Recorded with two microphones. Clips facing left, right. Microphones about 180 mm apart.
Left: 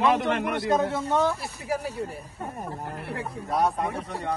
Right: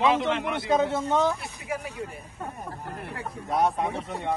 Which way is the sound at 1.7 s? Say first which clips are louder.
Left 4 dB; 35° left (ahead or behind).